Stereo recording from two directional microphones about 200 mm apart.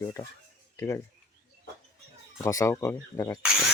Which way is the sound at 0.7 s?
15° left (ahead or behind).